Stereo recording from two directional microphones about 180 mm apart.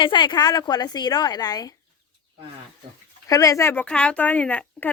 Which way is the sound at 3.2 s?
20° left (ahead or behind).